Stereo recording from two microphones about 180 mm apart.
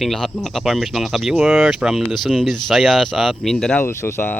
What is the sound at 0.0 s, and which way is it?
Speech, centre (ahead or behind).